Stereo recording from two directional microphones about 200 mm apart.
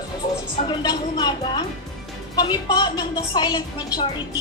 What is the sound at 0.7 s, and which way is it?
A woman's voice, 20° left (ahead or behind).